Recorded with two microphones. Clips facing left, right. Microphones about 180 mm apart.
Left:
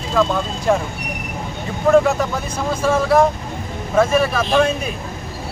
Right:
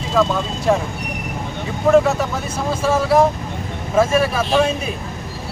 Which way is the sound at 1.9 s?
Centre (ahead or behind).